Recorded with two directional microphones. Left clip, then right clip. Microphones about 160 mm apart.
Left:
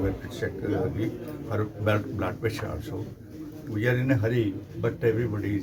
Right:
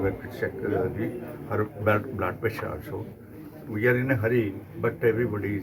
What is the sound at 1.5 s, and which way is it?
Speech, 20° left (ahead or behind).